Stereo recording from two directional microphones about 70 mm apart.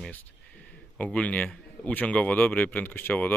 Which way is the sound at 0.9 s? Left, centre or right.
Centre.